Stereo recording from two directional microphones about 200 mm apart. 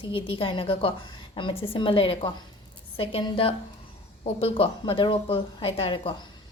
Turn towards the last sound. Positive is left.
turn(degrees=25)  # may be behind; listen again after turning